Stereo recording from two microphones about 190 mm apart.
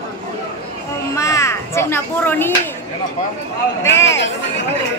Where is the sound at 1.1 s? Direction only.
15° left (ahead or behind).